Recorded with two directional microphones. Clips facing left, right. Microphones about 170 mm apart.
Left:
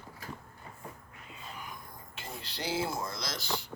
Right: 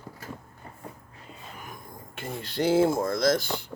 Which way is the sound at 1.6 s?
50° right (ahead or behind).